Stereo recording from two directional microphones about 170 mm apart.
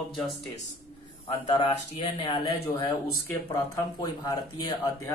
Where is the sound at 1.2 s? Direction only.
30° left (ahead or behind).